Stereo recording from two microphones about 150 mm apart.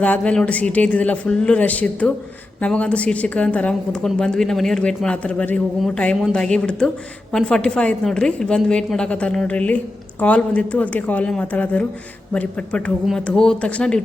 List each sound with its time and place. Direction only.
0.0 s a woman's voice: 10° left (ahead or behind)